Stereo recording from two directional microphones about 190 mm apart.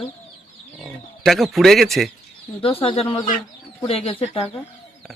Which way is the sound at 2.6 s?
30° left (ahead or behind).